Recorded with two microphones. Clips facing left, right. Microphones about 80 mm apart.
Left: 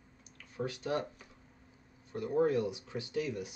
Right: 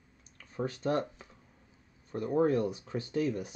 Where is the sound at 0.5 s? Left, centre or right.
Right.